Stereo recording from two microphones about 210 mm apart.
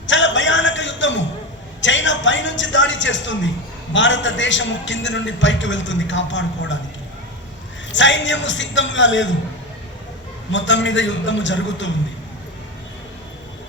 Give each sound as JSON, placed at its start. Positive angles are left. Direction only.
{"t": 0.1, "sound": "a sound", "side_deg": 60}
{"t": 1.8, "sound": "a man's voice", "side_deg": 60}
{"t": 7.9, "sound": "a man's voice", "side_deg": 60}
{"t": 10.5, "sound": "a man's voice", "side_deg": 60}